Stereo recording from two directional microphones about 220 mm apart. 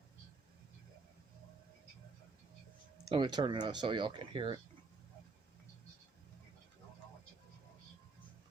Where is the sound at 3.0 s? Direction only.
20° right (ahead or behind).